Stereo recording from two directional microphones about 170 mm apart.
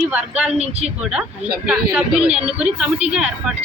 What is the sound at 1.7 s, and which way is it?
A woman's voice, 5° right (ahead or behind).